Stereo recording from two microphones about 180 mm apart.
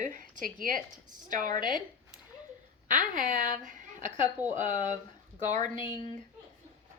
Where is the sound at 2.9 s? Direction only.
45° right (ahead or behind).